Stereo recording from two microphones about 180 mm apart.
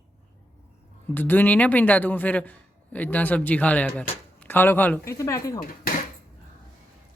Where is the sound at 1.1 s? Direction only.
10° left (ahead or behind).